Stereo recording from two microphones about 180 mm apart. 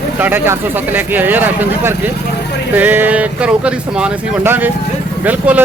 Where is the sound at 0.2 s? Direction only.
10° right (ahead or behind).